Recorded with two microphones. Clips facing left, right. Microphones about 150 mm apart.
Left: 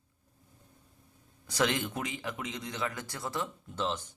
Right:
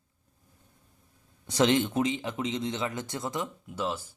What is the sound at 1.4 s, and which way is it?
Speech, 25° right (ahead or behind).